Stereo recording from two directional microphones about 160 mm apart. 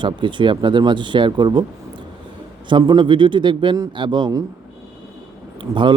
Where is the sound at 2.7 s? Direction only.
30° right (ahead or behind).